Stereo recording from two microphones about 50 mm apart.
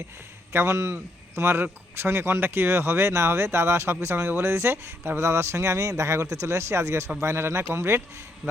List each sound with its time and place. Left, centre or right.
0.5 s speech: right
1.4 s speech: right